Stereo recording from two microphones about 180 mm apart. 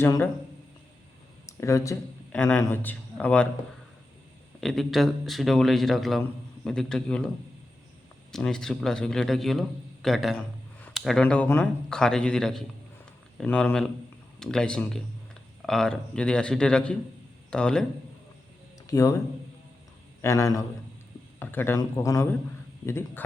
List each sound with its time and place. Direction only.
0.0 s speech: 15° left (ahead or behind)
1.5 s a man's voice: 15° left (ahead or behind)
4.6 s a man's voice: centre (ahead or behind)
8.3 s a man's voice: 5° left (ahead or behind)
18.9 s speech: 20° left (ahead or behind)
20.2 s a man's voice: 20° left (ahead or behind)